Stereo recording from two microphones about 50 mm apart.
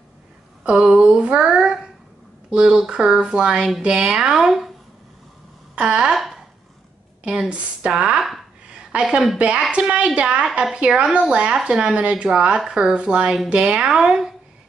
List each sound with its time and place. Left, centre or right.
0.7 s speech: centre
1.0 s speech: centre
4.4 s speech: centre
5.8 s a woman's voice: centre
6.1 s speech: centre
7.4 s a woman's voice: right
8.2 s speech: centre
8.6 s a sound: centre
9.7 s a woman's voice: right
12.9 s a woman's voice: centre